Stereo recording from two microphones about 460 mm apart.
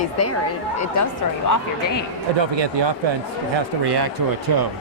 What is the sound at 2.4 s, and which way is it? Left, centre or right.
Speech, right.